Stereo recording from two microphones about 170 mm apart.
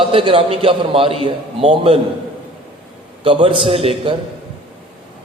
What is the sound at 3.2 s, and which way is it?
Speech, 30° right (ahead or behind).